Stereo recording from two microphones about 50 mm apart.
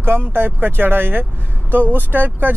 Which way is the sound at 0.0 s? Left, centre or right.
Right.